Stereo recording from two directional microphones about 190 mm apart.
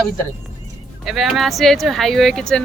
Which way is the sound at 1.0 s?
Centre (ahead or behind).